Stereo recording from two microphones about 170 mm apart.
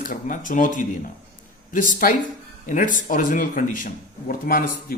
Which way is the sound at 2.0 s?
55° left (ahead or behind).